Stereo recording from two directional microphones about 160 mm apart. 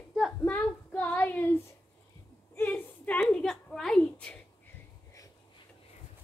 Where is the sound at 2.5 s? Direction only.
10° left (ahead or behind).